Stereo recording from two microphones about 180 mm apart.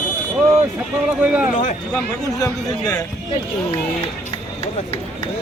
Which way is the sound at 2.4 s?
20° left (ahead or behind).